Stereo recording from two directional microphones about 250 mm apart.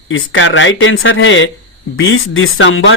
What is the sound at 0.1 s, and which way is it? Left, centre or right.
A man's voice, left.